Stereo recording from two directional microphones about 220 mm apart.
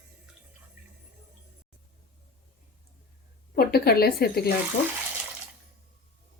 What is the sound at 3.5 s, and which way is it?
Speech, 45° left (ahead or behind).